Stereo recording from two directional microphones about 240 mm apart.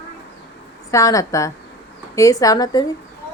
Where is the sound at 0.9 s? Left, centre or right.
Centre.